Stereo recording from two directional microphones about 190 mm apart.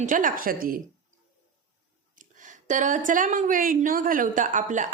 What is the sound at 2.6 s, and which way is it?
A woman's voice, 40° right (ahead or behind).